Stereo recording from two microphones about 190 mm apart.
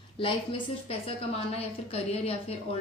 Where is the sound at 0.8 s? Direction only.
30° left (ahead or behind).